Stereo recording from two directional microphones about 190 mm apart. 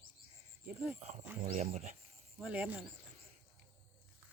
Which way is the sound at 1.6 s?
35° right (ahead or behind).